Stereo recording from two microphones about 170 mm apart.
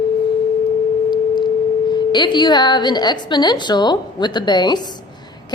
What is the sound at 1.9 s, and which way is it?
A woman's voice, 25° left (ahead or behind).